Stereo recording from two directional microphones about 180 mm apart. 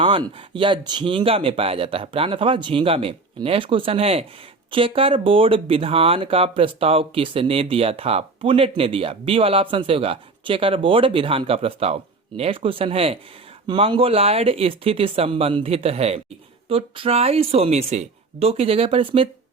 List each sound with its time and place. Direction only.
0.0 s speech: 30° right (ahead or behind)